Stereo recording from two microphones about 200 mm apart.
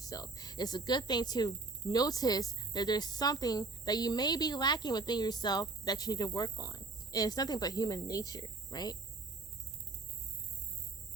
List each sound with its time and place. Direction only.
0.0 s speech: 20° left (ahead or behind)